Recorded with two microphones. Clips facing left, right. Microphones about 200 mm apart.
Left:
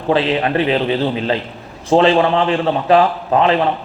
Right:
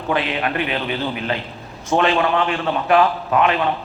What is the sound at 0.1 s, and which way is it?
A man's voice, 30° left (ahead or behind).